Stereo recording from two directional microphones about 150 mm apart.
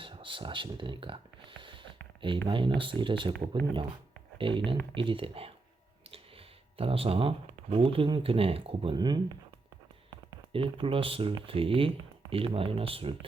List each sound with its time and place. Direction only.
0.0 s a sound: 35° right (ahead or behind)
2.5 s speech: 35° right (ahead or behind)
4.4 s speech: 35° right (ahead or behind)
6.7 s speech: 40° right (ahead or behind)
10.5 s speech: 35° right (ahead or behind)